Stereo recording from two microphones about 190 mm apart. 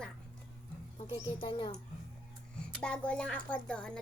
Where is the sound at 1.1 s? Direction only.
25° left (ahead or behind).